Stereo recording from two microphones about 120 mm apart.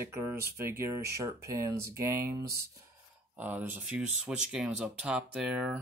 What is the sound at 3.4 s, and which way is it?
Speech, 15° right (ahead or behind).